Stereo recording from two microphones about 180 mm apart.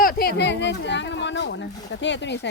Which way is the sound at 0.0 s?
55° left (ahead or behind).